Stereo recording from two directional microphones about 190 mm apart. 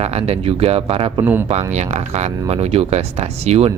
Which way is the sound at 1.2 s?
10° right (ahead or behind).